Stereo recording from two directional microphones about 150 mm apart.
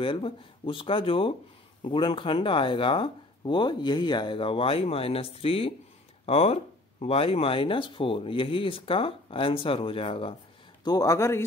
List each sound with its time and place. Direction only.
0.0 s speech: 35° left (ahead or behind)
10.8 s speech: 25° left (ahead or behind)